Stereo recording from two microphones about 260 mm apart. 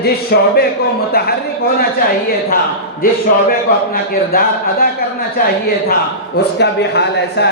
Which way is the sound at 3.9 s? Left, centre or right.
Left.